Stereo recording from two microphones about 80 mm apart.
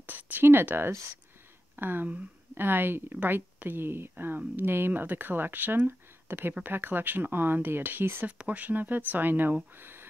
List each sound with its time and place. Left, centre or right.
0.0 s speech: right
8.3 s speech: centre